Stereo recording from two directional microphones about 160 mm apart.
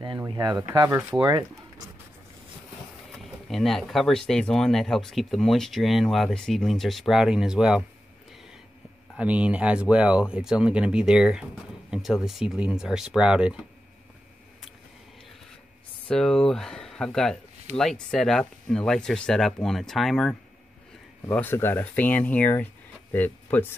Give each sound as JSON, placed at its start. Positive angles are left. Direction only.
{"t": 0.3, "sound": "speech", "side_deg": -25}
{"t": 3.4, "sound": "speech", "side_deg": 0}
{"t": 9.1, "sound": "speech", "side_deg": -10}
{"t": 16.1, "sound": "speech", "side_deg": 5}
{"t": 21.3, "sound": "speech", "side_deg": 10}